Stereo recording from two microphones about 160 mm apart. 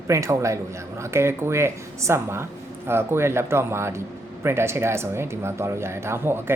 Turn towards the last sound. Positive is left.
turn(degrees=-15)  # may be behind; listen again after turning